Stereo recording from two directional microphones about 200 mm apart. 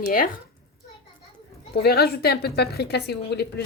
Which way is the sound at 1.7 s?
50° left (ahead or behind).